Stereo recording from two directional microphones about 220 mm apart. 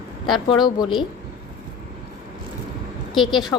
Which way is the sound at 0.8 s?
20° left (ahead or behind).